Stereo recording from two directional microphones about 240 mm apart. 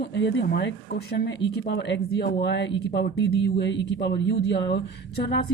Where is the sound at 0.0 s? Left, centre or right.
Left.